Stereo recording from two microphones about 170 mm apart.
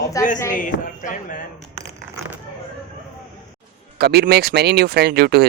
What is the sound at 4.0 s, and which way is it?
Speech, 70° right (ahead or behind).